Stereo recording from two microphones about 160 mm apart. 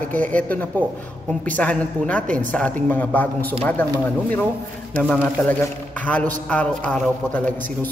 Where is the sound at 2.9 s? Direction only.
10° left (ahead or behind).